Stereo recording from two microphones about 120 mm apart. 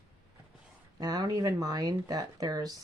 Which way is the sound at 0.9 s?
35° right (ahead or behind).